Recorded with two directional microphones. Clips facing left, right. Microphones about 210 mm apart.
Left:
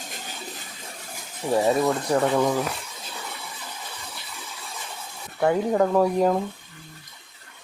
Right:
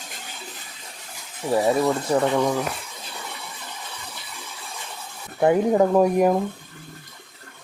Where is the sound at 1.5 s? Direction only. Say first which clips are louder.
Right 1 dB; centre (ahead or behind).